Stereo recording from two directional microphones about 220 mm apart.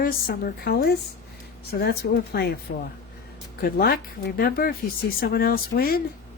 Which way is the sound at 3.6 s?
45° left (ahead or behind).